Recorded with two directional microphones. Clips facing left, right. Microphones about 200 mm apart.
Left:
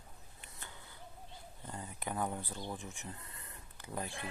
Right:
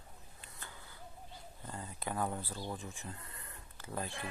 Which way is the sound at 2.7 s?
20° left (ahead or behind).